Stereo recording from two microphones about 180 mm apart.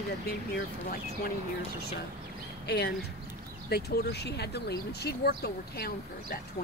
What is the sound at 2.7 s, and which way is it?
Speech, 65° left (ahead or behind).